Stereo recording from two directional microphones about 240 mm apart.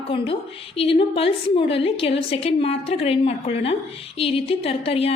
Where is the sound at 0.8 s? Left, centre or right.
Left.